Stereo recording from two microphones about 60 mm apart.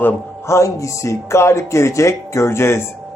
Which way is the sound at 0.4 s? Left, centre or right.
Left.